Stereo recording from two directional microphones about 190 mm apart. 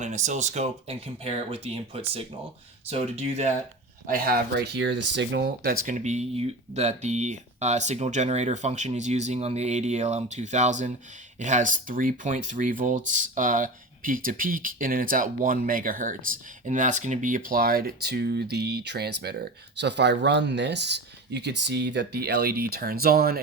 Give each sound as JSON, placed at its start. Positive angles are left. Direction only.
{"t": 0.0, "sound": "speech", "side_deg": -40}
{"t": 4.0, "sound": "speech", "side_deg": -50}
{"t": 5.9, "sound": "speech", "side_deg": -40}